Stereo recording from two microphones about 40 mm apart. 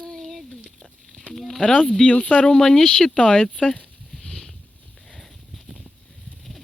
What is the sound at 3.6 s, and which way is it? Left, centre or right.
Speech, left.